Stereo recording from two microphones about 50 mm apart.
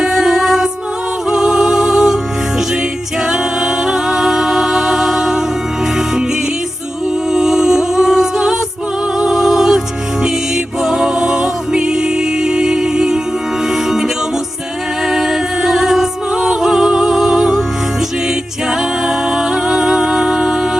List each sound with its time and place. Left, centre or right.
0.0 s music: centre
3.2 s music: centre
7.3 s music: centre
10.8 s music: centre
15.0 s music: centre
19.0 s music: centre